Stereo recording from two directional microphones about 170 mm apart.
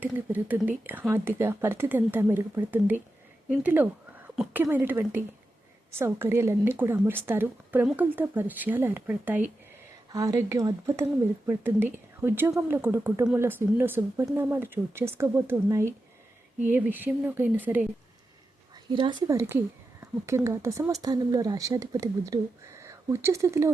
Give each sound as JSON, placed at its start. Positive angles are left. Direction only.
{"t": 0.0, "sound": "a woman's voice", "side_deg": -10}
{"t": 19.3, "sound": "a woman's voice", "side_deg": -15}